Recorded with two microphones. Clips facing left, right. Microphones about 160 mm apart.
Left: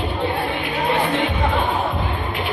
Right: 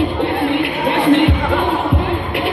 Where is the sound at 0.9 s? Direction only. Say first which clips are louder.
Right 8 dB; 65° right (ahead or behind).